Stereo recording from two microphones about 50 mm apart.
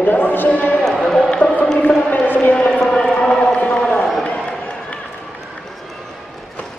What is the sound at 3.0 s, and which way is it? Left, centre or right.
Chant, centre.